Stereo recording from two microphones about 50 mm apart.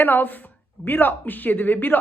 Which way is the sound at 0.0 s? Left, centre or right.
Left.